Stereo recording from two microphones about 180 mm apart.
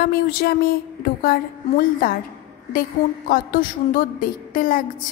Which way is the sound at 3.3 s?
50° left (ahead or behind).